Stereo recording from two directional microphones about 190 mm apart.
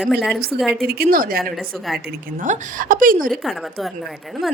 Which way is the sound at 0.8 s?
55° right (ahead or behind).